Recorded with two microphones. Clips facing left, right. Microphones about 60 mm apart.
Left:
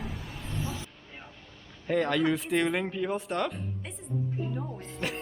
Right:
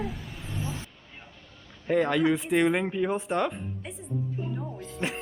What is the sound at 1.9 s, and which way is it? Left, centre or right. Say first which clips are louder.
Speech: right 3 dB; centre.